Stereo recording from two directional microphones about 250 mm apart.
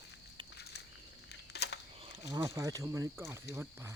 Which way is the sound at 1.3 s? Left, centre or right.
Left.